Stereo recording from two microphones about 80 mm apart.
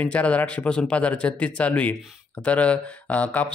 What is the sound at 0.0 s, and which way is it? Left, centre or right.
Speech, centre.